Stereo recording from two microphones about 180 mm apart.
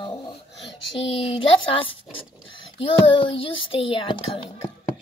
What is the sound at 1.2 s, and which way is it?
A child's voice, 30° left (ahead or behind).